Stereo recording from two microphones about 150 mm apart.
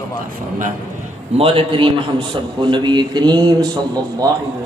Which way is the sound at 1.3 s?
40° right (ahead or behind).